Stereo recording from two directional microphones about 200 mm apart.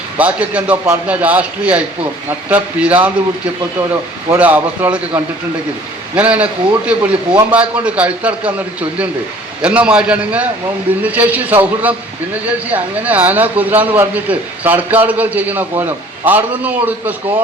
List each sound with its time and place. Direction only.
0.2 s a man's voice: 5° right (ahead or behind)